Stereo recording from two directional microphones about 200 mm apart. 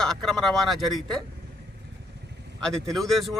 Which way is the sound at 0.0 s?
Centre (ahead or behind).